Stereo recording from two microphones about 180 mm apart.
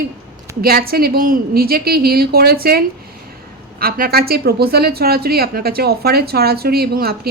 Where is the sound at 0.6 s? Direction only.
55° right (ahead or behind).